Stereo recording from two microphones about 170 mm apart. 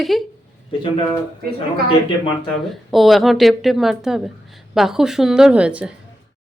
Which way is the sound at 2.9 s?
Centre (ahead or behind).